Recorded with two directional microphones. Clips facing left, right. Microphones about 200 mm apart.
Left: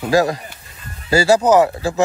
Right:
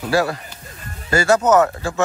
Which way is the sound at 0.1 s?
40° left (ahead or behind).